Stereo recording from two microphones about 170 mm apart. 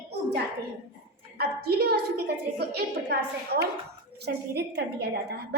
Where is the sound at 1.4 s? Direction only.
65° right (ahead or behind).